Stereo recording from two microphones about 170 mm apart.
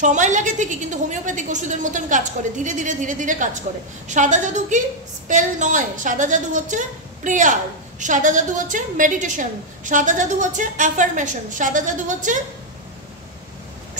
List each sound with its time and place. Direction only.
0.0 s a woman's voice: 45° right (ahead or behind)